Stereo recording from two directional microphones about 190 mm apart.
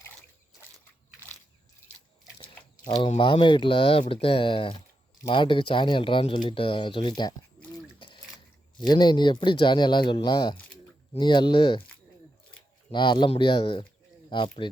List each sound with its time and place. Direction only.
2.8 s speech: 35° left (ahead or behind)
7.9 s a sound: 25° left (ahead or behind)
8.9 s speech: 20° left (ahead or behind)
12.9 s speech: 25° left (ahead or behind)